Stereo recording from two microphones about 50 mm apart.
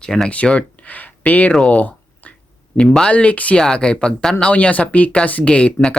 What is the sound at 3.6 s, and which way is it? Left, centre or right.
Speech, centre.